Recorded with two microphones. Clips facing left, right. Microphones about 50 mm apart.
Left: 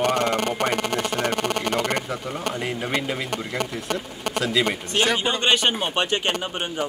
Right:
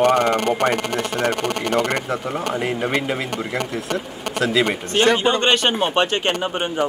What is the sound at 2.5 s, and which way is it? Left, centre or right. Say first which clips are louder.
Speech: right 4 dB; centre.